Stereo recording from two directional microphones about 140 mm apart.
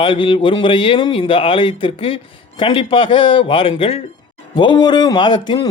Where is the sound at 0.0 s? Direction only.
40° left (ahead or behind).